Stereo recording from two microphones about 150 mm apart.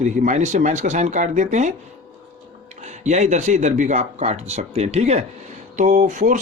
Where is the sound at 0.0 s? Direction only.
55° right (ahead or behind).